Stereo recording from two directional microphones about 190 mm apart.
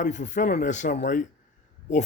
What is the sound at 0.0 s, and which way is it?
Speech, 40° left (ahead or behind).